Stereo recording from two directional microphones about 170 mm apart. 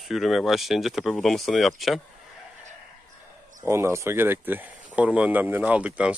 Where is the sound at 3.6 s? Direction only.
15° right (ahead or behind).